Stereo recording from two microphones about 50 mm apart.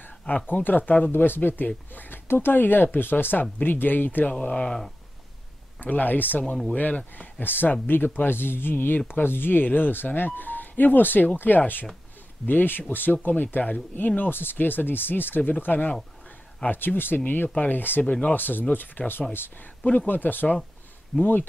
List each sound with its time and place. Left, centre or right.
0.5 s speech: left
4.3 s speech: left
5.8 s speech: left
7.2 s speech: left